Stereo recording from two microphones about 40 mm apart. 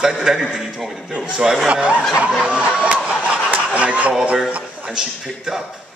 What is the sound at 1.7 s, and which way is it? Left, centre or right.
Speech, right.